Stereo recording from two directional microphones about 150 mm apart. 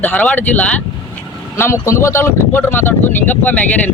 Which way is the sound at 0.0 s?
10° left (ahead or behind).